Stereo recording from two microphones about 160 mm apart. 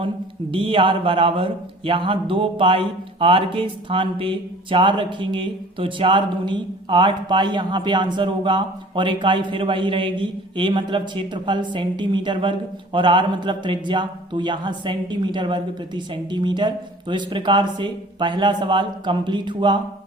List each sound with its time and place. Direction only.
0.5 s a man's voice: 35° right (ahead or behind)